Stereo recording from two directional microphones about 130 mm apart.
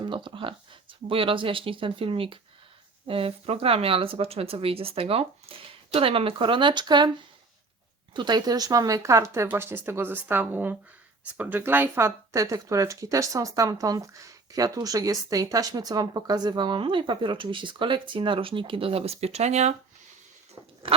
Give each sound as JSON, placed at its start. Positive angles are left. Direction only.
{"t": 0.0, "sound": "speech", "side_deg": -40}
{"t": 8.1, "sound": "speech", "side_deg": -35}
{"t": 20.8, "sound": "crunch", "side_deg": -45}